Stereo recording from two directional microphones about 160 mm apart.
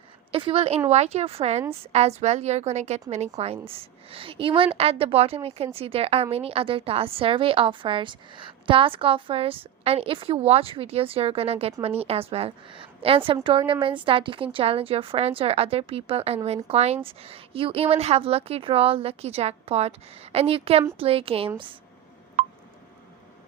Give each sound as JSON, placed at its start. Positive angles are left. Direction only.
{"t": 0.3, "sound": "a woman's voice", "side_deg": -35}